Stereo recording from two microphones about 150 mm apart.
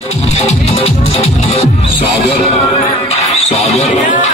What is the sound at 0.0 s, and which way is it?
Music, 45° left (ahead or behind).